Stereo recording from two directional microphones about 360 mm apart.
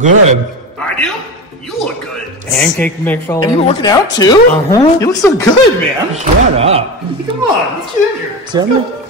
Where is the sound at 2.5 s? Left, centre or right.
Centre.